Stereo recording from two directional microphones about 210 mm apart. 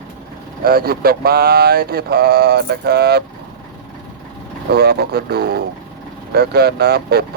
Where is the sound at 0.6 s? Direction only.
45° right (ahead or behind).